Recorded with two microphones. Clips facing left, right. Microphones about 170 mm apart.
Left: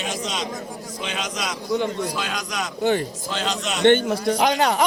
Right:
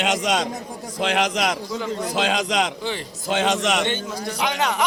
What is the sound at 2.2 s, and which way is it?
Speech, 85° right.